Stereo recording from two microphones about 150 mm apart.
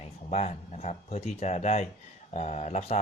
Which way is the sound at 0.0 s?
45° left (ahead or behind).